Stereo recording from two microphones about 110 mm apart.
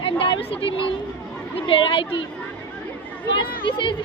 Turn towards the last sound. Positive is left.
turn(degrees=50)  # may be behind; listen again after turning